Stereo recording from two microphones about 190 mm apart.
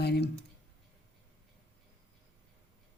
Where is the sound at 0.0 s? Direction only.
60° left (ahead or behind).